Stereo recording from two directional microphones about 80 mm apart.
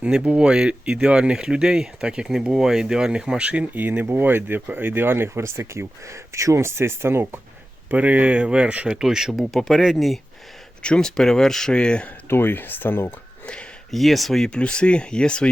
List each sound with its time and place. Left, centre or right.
0.0 s speech: centre; by 7.3 s right
7.9 s speech: centre
10.8 s speech: centre
12.3 s speech: left
13.4 s a sound: centre
13.9 s speech: centre